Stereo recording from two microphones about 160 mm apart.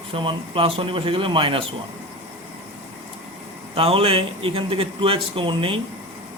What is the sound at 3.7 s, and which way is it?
A man's voice, 35° right (ahead or behind).